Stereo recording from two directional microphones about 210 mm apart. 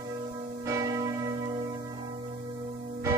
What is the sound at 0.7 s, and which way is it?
Church bell, 15° right (ahead or behind).